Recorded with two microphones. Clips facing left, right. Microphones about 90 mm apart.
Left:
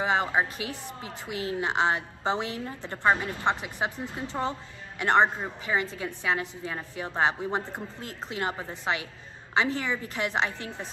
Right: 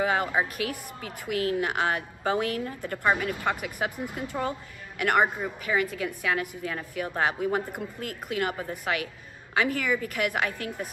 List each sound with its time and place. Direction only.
0.0 s a woman's voice: 25° left (ahead or behind)